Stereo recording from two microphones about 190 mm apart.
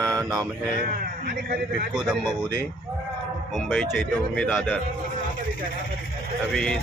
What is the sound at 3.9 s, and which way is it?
Speech, 5° left (ahead or behind).